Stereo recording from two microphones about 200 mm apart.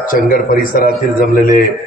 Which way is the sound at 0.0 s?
45° left (ahead or behind).